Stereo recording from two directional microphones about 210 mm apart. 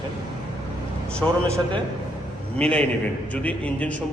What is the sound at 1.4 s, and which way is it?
Speech, 15° right (ahead or behind).